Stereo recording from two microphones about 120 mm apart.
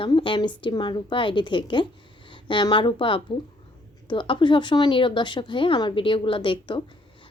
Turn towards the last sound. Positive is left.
turn(degrees=45)  # may be behind; listen again after turning